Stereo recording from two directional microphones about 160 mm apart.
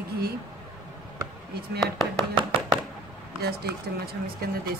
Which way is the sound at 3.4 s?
80° right.